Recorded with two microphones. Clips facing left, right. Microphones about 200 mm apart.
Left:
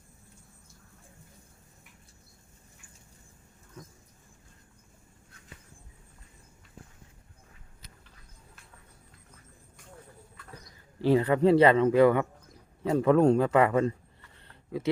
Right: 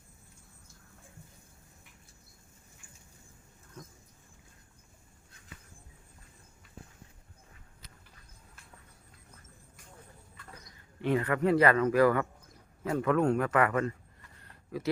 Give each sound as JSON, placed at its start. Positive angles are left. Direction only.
{"t": 11.0, "sound": "a man's voice", "side_deg": 30}